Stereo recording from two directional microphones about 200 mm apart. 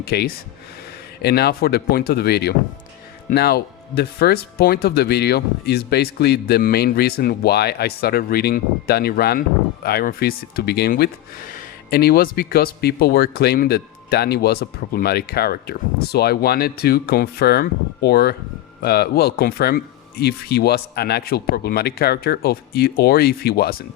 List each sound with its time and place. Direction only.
0.0 s speech: 50° left (ahead or behind)